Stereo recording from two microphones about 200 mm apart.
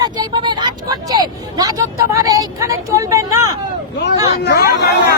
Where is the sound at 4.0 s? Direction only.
55° left (ahead or behind).